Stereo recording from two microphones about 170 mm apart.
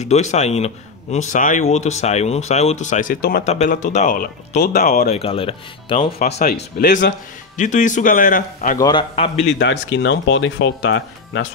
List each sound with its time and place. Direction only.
0.0 s speech: 40° left (ahead or behind); by 3.4 s 60° left (ahead or behind)
3.4 s speech: 40° left (ahead or behind)
5.1 s speech: 35° left (ahead or behind)
6.4 s speech: 60° left (ahead or behind)
8.7 s a man's voice: 25° left (ahead or behind)
9.1 s speech: 35° left (ahead or behind)
9.6 s speech: 90° left